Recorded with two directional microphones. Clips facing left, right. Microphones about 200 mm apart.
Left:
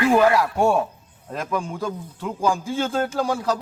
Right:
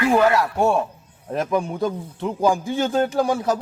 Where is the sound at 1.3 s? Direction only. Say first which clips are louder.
Right 5 dB; 20° right (ahead or behind).